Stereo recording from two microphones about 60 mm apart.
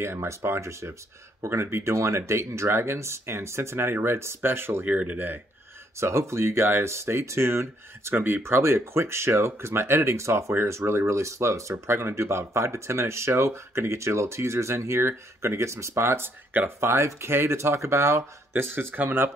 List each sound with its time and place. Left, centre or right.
0.0 s speech: right
4.9 s speech: right
5.9 s speech: right
10.5 s speech: right